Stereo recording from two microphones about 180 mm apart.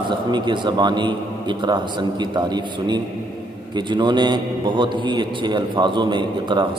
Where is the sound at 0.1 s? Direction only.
25° right (ahead or behind).